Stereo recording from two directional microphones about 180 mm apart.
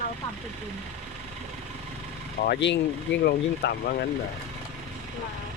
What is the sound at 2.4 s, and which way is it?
Speech, 75° left (ahead or behind).